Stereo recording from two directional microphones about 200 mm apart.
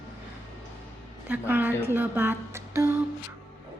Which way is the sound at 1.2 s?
10° right (ahead or behind).